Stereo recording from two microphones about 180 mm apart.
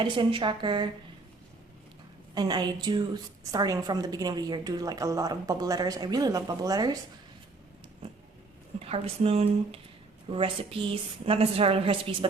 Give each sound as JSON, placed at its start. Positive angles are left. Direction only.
{"t": 0.0, "sound": "a woman's voice", "side_deg": -25}
{"t": 2.3, "sound": "a woman's voice", "side_deg": -20}
{"t": 8.8, "sound": "a woman's voice", "side_deg": -35}